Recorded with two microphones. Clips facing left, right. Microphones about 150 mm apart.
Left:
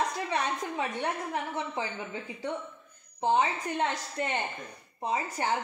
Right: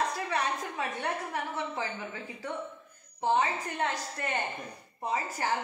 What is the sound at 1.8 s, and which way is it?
Speech, 20° left (ahead or behind).